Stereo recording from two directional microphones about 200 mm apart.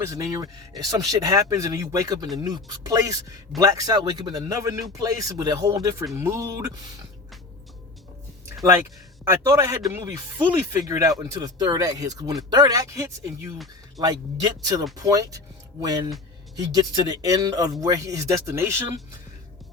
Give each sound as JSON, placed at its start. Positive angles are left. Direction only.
{"t": 0.0, "sound": "speech", "side_deg": -15}
{"t": 9.2, "sound": "speech", "side_deg": -15}
{"t": 16.6, "sound": "speech", "side_deg": -20}